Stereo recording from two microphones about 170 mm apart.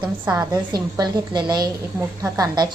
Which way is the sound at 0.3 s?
25° right (ahead or behind).